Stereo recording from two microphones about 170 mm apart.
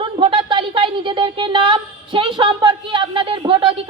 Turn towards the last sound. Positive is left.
turn(degrees=-30)  # may be behind; listen again after turning